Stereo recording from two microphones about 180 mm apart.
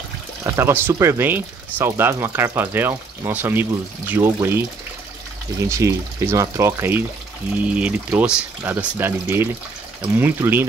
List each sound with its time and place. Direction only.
0.4 s speech: 15° right (ahead or behind)
5.7 s speech: 15° right (ahead or behind)